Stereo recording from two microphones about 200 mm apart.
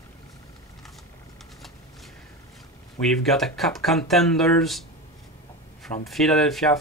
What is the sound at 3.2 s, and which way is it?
Speech, centre (ahead or behind).